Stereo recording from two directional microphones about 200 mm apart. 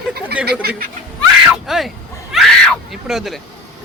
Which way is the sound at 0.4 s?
50° right (ahead or behind).